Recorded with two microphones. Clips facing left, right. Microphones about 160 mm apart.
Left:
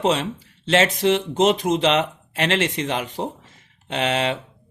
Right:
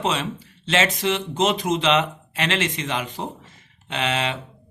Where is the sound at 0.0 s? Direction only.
55° left (ahead or behind).